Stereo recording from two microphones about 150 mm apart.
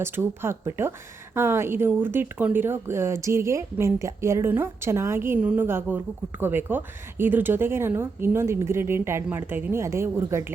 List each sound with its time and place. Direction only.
0.0 s speech: 15° right (ahead or behind)